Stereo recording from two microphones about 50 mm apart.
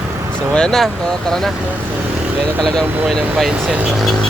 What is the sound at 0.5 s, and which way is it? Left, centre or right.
Speech, centre.